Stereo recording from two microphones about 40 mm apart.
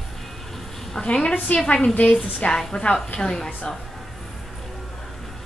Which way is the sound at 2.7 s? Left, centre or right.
Left.